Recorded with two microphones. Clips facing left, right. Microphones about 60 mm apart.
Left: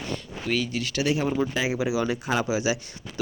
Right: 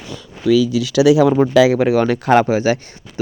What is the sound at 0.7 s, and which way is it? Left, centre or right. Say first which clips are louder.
Speech: right 13 dB; right.